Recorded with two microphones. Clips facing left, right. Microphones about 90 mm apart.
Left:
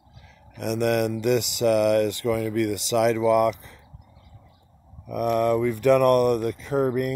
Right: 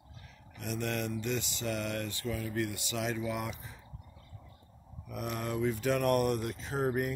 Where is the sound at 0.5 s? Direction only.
80° left.